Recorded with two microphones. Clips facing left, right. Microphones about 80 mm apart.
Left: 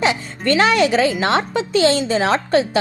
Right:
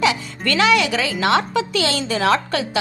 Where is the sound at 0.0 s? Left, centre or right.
Left.